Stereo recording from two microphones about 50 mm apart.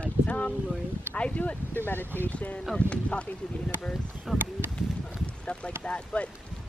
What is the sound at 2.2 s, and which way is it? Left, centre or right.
Speech, left.